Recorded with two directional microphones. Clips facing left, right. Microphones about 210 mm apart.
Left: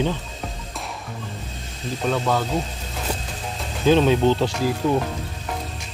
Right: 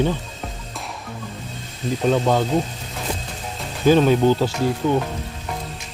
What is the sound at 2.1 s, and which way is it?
Speech, 25° right (ahead or behind).